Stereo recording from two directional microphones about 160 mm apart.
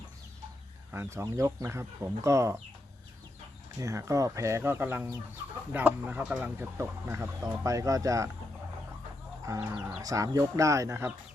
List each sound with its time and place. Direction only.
0.9 s speech: 15° right (ahead or behind)
3.8 s speech: 20° right (ahead or behind)
9.5 s speech: 15° right (ahead or behind)
10.0 s speech: 20° right (ahead or behind)